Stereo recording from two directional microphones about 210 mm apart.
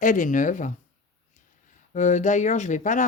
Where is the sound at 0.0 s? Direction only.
40° left (ahead or behind).